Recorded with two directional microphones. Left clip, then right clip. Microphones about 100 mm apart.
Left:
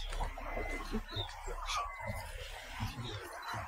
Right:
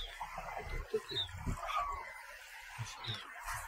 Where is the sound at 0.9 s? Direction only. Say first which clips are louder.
Right 6 dB; 45° right (ahead or behind).